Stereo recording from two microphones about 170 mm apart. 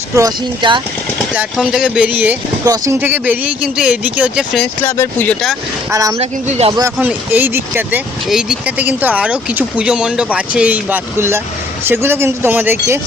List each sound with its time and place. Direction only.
0.2 s speech: 25° right (ahead or behind)
1.4 s speech: 5° right (ahead or behind)
4.8 s speech: 15° left (ahead or behind)
5.9 s speech: 20° right (ahead or behind)
6.1 s speech: 35° right (ahead or behind)
7.0 s speech: 10° right (ahead or behind)